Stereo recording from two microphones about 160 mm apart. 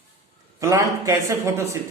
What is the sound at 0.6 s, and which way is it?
A man's voice, 20° right (ahead or behind).